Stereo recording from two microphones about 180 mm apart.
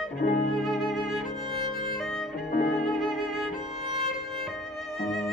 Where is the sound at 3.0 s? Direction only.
Centre (ahead or behind).